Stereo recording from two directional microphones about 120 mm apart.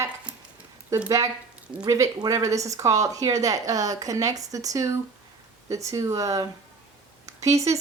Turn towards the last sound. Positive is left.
turn(degrees=-25)  # may be behind; listen again after turning